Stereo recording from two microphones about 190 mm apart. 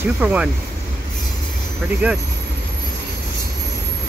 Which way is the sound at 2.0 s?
10° right (ahead or behind).